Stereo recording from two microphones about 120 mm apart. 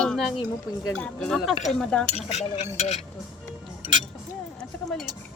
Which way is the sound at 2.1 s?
65° left (ahead or behind).